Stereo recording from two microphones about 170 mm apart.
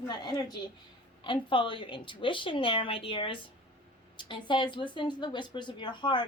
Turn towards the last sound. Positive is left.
turn(degrees=25)  # may be behind; listen again after turning